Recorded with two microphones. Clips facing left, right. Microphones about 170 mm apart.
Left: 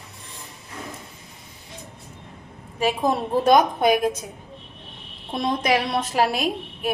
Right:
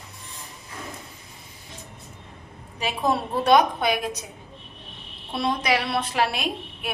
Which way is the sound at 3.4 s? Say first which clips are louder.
Left 2 dB; 45° left (ahead or behind).